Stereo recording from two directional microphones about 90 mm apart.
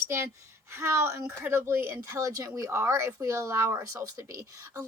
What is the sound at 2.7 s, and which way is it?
A woman's voice, 30° right (ahead or behind).